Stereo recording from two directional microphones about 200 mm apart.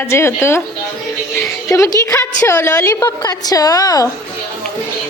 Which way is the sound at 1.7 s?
15° left (ahead or behind).